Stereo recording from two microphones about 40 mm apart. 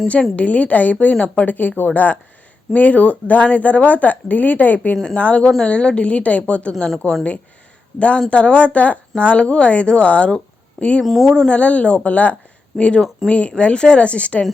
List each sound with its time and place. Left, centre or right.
0.1 s speech: left
5.1 s a woman's voice: left
10.3 s a sound: left
11.0 s speech: centre
11.3 s a woman's voice: left